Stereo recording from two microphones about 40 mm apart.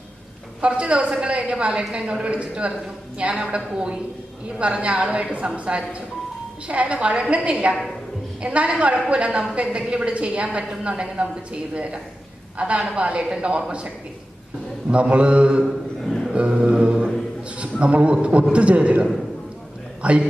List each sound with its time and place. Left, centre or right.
0.6 s a woman's voice: right
15.6 s a man's voice: centre
16.3 s mantra: right
17.6 s a man's voice: right